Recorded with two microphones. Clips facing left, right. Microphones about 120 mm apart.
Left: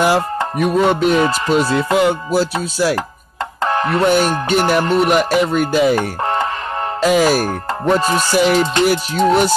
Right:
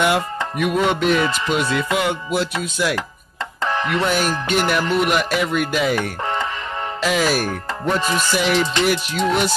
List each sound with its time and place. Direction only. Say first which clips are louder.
0.0 s speech: left 4 dB; 35° left (ahead or behind)
3.6 s music: left 4 dB; 45° left (ahead or behind)
4.0 s speech: left 6 dB; 30° left (ahead or behind)